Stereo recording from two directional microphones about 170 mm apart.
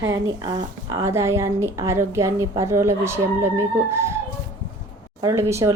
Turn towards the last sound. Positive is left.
turn(degrees=-15)  # may be behind; listen again after turning